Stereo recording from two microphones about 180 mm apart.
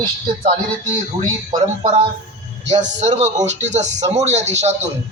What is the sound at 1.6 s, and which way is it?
Speech, 35° right (ahead or behind).